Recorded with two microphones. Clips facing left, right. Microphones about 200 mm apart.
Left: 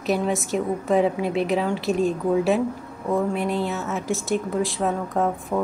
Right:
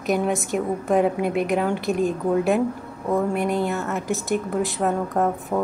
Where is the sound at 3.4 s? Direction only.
50° right (ahead or behind).